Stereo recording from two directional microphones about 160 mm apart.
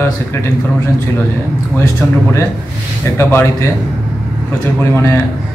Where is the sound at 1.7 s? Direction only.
15° left (ahead or behind).